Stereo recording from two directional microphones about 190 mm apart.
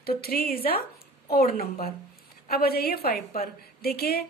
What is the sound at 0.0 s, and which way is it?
Speech, 55° left (ahead or behind).